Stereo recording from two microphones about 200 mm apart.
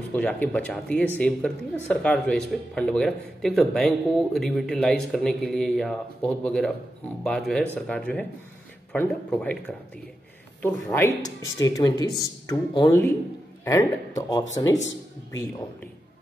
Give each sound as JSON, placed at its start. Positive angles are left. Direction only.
{"t": 0.1, "sound": "speech", "side_deg": 10}
{"t": 10.6, "sound": "speech", "side_deg": 10}